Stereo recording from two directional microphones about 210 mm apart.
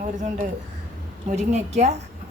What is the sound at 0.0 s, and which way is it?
A woman's voice, 35° right (ahead or behind).